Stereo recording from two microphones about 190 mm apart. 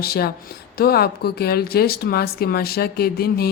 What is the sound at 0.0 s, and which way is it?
Speech, 55° left (ahead or behind).